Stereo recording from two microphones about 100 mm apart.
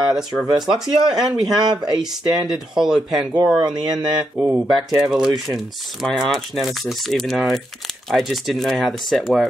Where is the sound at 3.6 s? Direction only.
45° right (ahead or behind).